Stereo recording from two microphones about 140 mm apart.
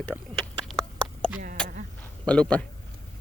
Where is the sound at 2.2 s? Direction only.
10° left (ahead or behind).